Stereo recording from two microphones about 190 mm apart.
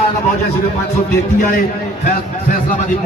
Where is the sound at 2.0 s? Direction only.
50° left (ahead or behind).